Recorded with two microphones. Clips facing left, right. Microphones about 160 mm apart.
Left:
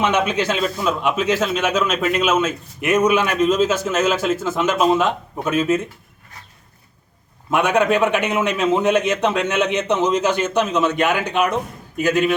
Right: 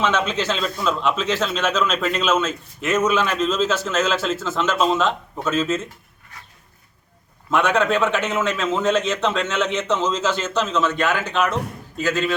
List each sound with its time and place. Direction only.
0.0 s speech: 15° left (ahead or behind)
7.5 s speech: 15° left (ahead or behind)